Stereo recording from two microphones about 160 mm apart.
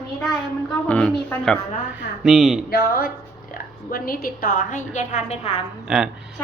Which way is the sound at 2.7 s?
70° left (ahead or behind).